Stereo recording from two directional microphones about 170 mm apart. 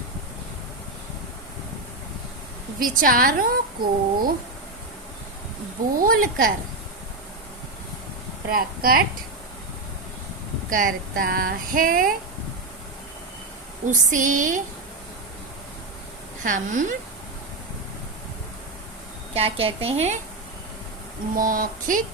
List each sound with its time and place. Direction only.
2.7 s a woman's voice: 55° right (ahead or behind)
6.0 s speech: 55° right (ahead or behind)
8.4 s speech: 60° right (ahead or behind)
10.7 s speech: 50° right (ahead or behind)
13.8 s a woman's voice: 50° right (ahead or behind)
16.4 s a woman's voice: 50° right (ahead or behind)
19.3 s a woman's voice: 35° right (ahead or behind)
21.3 s a woman's voice: 55° right (ahead or behind)